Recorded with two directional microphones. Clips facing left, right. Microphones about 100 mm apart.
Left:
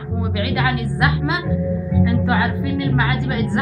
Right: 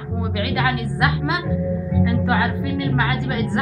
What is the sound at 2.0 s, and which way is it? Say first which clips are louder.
Music: even; 45° right (ahead or behind).